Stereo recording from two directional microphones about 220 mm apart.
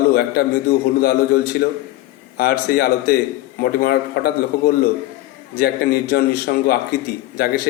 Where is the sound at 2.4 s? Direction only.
45° left (ahead or behind).